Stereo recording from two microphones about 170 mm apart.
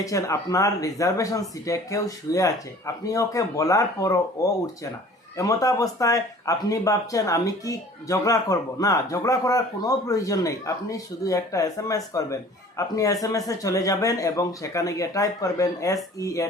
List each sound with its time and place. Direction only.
0.0 s speech: 20° left (ahead or behind)